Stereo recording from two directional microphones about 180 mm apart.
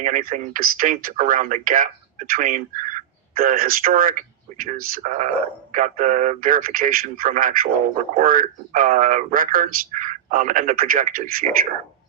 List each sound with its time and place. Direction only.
0.0 s speech: 50° right (ahead or behind)